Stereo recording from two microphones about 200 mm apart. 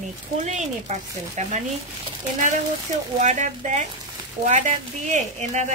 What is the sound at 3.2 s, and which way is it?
Speech, 35° right (ahead or behind).